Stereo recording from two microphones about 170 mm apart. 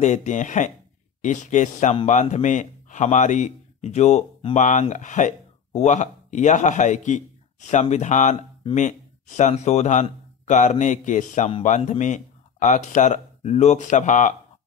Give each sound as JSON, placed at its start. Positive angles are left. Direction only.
{"t": 0.0, "sound": "a man's voice", "side_deg": 45}
{"t": 9.4, "sound": "speech", "side_deg": 40}